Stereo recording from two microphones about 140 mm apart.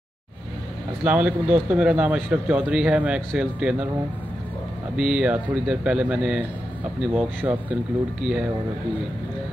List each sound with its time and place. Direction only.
1.0 s speech: 10° right (ahead or behind)
4.9 s speech: 5° right (ahead or behind)